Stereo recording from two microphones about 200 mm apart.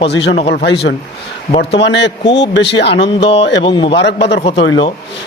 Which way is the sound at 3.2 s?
30° left (ahead or behind).